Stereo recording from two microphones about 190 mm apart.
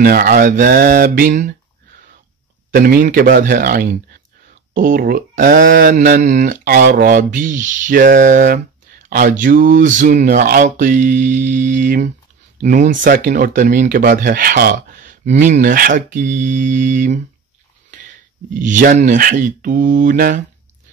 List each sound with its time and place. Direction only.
0.0 s speech: 50° right (ahead or behind)
2.7 s speech: 45° right (ahead or behind)
18.6 s speech: 45° right (ahead or behind)